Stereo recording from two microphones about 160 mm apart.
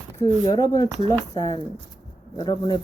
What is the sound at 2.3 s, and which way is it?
Speech, 25° left (ahead or behind).